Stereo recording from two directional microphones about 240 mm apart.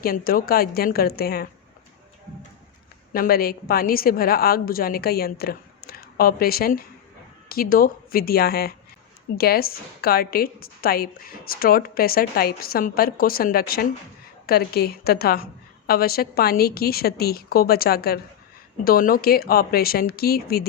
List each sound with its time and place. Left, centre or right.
0.0 s a woman's voice: left
3.1 s a woman's voice: left